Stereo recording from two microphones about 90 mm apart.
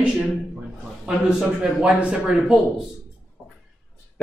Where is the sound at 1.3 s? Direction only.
10° right (ahead or behind).